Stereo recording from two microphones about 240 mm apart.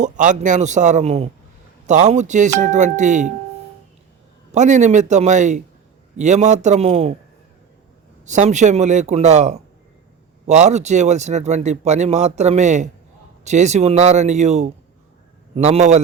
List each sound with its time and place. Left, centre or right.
0.0 s a man's voice: right
4.5 s speech: right
8.2 s speech: right